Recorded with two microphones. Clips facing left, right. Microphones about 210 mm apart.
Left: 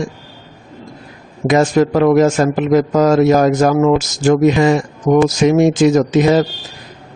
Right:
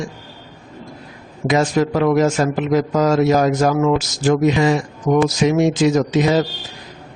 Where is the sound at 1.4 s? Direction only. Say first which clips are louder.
Left 4 dB; 50° left (ahead or behind).